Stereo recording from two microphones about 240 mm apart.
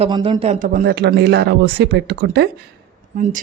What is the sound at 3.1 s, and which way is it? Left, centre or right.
Speech, right.